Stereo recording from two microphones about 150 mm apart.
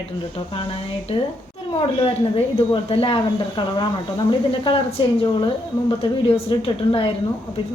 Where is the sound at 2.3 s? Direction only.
40° left (ahead or behind).